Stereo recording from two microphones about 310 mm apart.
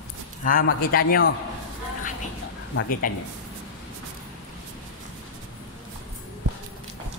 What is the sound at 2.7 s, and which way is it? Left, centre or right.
Speech, left.